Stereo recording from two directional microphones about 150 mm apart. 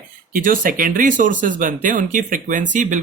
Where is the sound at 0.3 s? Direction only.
65° right (ahead or behind).